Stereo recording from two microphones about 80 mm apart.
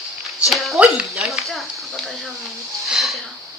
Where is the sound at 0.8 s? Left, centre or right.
Centre.